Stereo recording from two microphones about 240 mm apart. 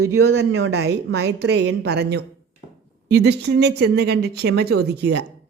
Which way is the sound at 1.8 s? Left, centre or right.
Right.